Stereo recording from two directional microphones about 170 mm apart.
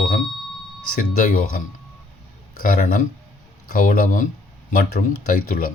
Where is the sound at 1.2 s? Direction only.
55° left (ahead or behind).